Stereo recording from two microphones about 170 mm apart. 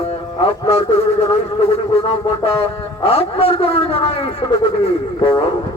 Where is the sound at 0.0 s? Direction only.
35° left (ahead or behind).